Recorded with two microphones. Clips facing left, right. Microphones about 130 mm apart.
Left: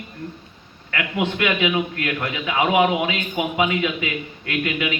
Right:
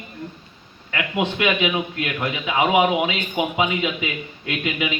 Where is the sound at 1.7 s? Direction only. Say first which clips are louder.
Left 2 dB; 20° right (ahead or behind).